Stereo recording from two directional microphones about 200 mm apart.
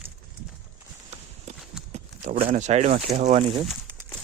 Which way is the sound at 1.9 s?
35° right (ahead or behind).